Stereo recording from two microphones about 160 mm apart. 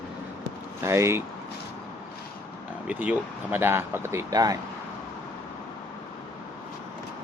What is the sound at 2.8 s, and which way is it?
Speech, 10° right (ahead or behind).